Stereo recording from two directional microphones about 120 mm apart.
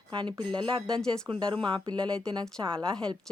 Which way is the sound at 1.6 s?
40° right (ahead or behind).